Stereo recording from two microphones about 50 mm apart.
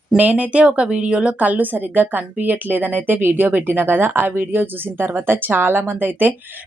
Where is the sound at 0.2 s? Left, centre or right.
Right.